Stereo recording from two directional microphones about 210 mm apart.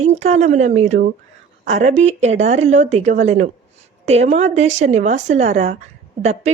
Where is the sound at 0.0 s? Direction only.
35° right (ahead or behind).